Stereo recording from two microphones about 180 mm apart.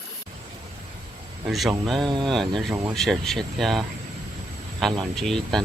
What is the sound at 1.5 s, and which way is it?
Speech, centre (ahead or behind).